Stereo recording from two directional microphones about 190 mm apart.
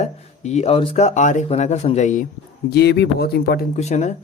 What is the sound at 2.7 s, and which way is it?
Speech, 60° left (ahead or behind).